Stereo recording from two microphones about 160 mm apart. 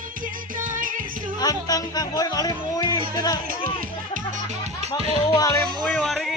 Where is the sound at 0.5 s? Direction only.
55° right (ahead or behind).